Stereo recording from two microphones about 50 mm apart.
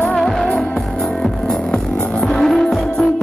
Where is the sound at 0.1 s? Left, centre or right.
Centre.